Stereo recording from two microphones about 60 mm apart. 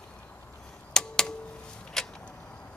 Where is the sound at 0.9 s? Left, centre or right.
Centre.